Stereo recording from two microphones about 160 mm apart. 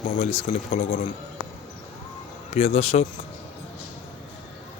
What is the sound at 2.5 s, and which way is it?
Speech, 40° left (ahead or behind).